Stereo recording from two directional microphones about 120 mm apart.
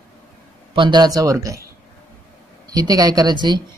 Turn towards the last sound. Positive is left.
turn(degrees=-35)  # may be behind; listen again after turning